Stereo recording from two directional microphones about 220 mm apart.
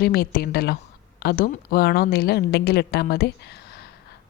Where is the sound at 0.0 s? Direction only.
45° left (ahead or behind).